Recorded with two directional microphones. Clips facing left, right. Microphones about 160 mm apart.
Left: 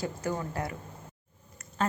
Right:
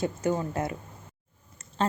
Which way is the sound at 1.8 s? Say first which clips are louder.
Right 2 dB; 30° right (ahead or behind).